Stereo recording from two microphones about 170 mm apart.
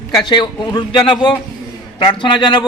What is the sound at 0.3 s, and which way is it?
Speech, 25° left (ahead or behind).